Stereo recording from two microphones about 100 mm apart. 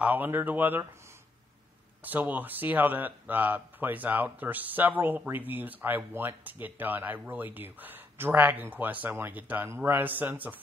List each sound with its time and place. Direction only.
0.0 s speech: 20° right (ahead or behind)
2.0 s speech: 15° right (ahead or behind)